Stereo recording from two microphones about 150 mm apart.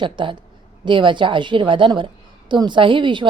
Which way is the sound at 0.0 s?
30° right (ahead or behind).